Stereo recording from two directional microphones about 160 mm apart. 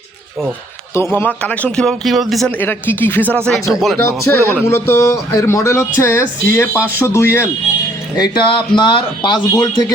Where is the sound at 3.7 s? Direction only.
Centre (ahead or behind).